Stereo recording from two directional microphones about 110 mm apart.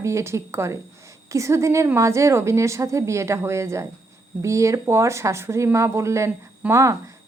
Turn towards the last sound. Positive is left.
turn(degrees=-25)  # may be behind; listen again after turning